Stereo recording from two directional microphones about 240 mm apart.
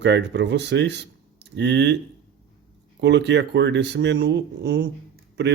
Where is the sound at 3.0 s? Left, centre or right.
Right.